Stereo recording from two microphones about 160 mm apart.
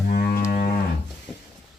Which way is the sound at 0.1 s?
75° left (ahead or behind).